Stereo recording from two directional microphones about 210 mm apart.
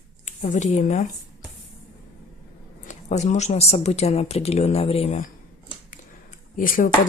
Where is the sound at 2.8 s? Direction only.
35° left (ahead or behind).